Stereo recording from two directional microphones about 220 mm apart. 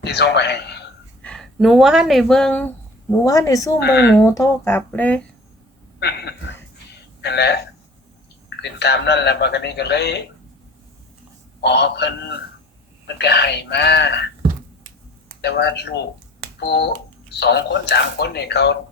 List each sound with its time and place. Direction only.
0.0 s a man's voice: 50° left (ahead or behind)
1.2 s speech: 5° left (ahead or behind)
3.8 s a man's voice: 50° left (ahead or behind)
4.2 s speech: 15° left (ahead or behind)
6.0 s a man's voice: 50° left (ahead or behind)
11.6 s a man's voice: 50° left (ahead or behind)
13.1 s a man's voice: 50° left (ahead or behind)
15.4 s a man's voice: 50° left (ahead or behind)